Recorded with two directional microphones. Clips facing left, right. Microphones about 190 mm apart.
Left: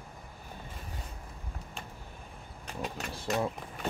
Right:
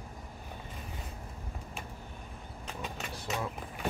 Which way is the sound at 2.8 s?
Centre (ahead or behind).